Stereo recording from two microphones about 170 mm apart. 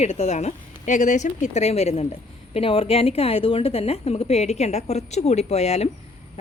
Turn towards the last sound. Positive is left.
turn(degrees=40)  # may be behind; listen again after turning